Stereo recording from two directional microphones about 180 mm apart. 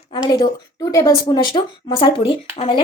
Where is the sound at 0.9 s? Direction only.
20° left (ahead or behind).